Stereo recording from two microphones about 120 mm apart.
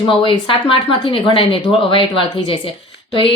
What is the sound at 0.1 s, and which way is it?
Speech, 45° left (ahead or behind).